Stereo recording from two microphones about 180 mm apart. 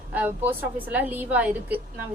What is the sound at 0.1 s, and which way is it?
A woman's voice, 10° right (ahead or behind).